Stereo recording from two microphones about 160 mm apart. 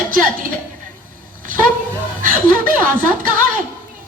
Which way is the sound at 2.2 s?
60° right (ahead or behind).